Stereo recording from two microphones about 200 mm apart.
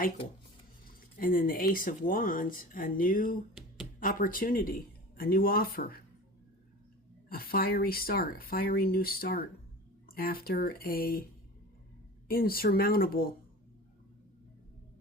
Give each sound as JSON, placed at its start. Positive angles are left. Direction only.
{"t": 1.2, "sound": "speech", "side_deg": 45}
{"t": 7.3, "sound": "speech", "side_deg": 50}
{"t": 12.3, "sound": "speech", "side_deg": 45}